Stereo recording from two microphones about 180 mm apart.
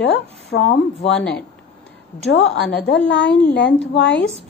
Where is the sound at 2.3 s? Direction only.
85° left.